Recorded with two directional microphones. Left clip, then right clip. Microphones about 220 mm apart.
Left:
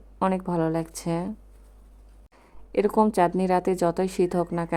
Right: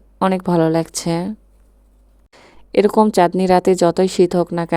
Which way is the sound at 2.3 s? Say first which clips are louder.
Right 10 dB; 40° right (ahead or behind).